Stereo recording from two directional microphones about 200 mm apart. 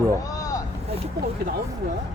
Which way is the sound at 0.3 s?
15° left (ahead or behind).